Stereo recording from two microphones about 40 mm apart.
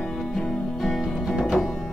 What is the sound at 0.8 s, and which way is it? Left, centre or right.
Music, centre.